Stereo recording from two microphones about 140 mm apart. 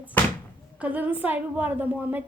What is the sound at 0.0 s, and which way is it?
Speech, 10° left (ahead or behind).